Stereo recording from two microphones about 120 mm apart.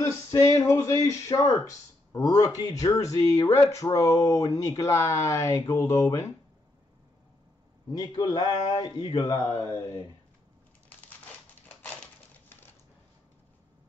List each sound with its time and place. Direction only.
0.0 s speech: 25° left (ahead or behind)
8.2 s speech: 35° left (ahead or behind)
11.8 s a sound: 15° left (ahead or behind)